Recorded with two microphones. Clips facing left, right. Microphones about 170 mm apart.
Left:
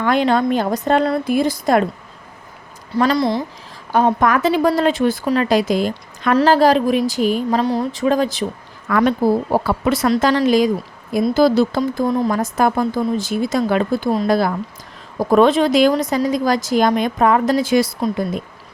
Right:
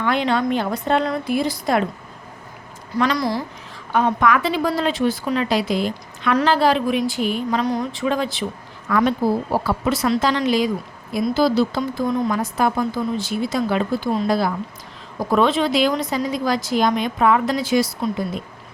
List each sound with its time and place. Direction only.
0.0 s a woman's voice: 45° left (ahead or behind)
3.0 s a woman's voice: 25° left (ahead or behind)
3.9 s a woman's voice: 40° left (ahead or behind)
8.9 s a woman's voice: 60° left (ahead or behind)
12.0 s speech: 35° left (ahead or behind)
12.4 s a woman's voice: 50° left (ahead or behind)